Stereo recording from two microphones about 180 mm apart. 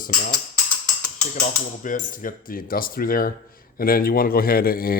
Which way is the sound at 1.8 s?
45° left (ahead or behind).